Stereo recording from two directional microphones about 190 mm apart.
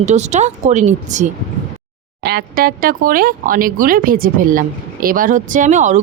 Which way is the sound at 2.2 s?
55° right (ahead or behind).